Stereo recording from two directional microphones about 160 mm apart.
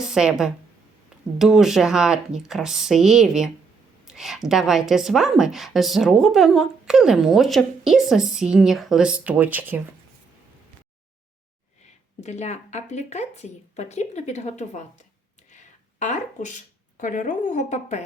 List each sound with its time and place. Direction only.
0.0 s a woman's voice: 5° right (ahead or behind)
12.2 s speech: 45° left (ahead or behind)